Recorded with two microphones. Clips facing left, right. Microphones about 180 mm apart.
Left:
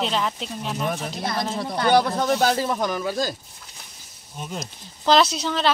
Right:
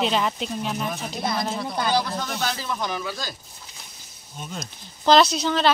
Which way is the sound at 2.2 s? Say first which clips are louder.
Left 8 dB; 50° left (ahead or behind).